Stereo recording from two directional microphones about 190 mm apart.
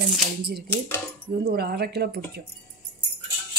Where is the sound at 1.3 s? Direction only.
60° right (ahead or behind).